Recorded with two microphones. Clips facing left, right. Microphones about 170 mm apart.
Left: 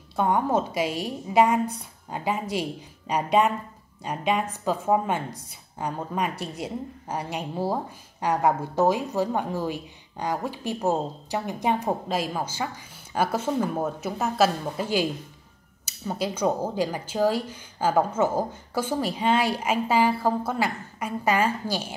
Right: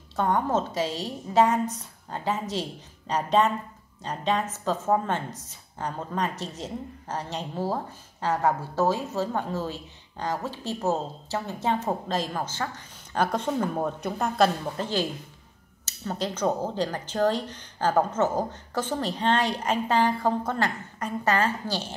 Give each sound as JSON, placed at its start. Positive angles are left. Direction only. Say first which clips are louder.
{"t": 0.1, "sound": "a woman's voice", "louder": "left 2 dB", "side_deg": 10}